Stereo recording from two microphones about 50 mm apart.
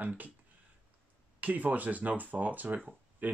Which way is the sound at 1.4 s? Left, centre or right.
Right.